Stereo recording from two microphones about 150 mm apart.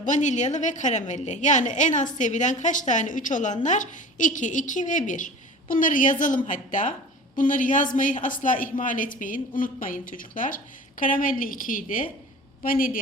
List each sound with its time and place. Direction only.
0.0 s a woman's voice: 55° left (ahead or behind)